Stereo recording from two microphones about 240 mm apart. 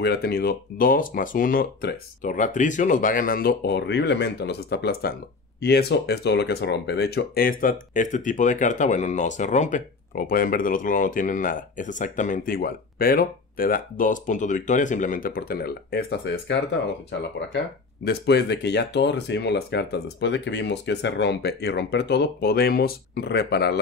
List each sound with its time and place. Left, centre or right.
0.0 s speech: left
18.0 s speech: left